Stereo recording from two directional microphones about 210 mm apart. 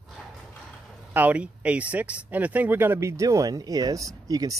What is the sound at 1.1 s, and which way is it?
Speech, 5° right (ahead or behind).